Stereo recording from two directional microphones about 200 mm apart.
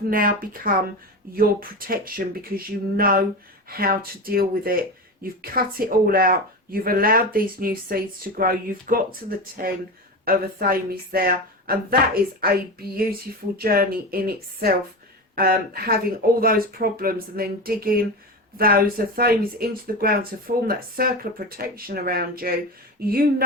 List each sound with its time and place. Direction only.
0.1 s speech: 45° right (ahead or behind)
10.2 s speech: 45° right (ahead or behind)